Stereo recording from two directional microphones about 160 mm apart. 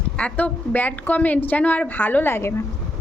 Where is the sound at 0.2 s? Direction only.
10° left (ahead or behind).